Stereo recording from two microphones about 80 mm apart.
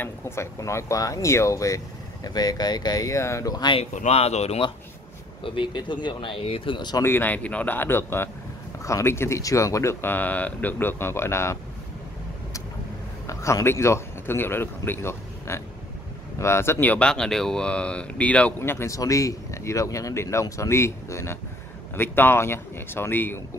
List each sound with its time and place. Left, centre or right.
0.0 s speech: left
2.2 s speech: left
3.5 s speech: left
5.4 s speech: left
7.0 s speech: left
9.4 s speech: left
10.0 s speech: left
13.3 s speech: left
16.8 s speech: centre
18.6 s speech: left
18.9 s speech: left